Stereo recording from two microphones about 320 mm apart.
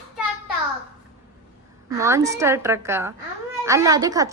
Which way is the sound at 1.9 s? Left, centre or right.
Centre.